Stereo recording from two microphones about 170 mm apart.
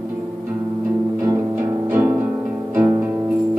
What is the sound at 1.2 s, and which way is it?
Music, 15° right (ahead or behind).